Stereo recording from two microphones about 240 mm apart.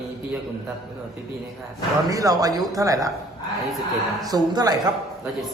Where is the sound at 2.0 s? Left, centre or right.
Centre.